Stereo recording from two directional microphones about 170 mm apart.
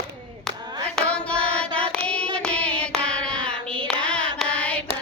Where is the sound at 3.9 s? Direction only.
5° left (ahead or behind).